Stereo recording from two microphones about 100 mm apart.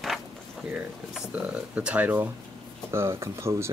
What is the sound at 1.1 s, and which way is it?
Speech, 10° right (ahead or behind).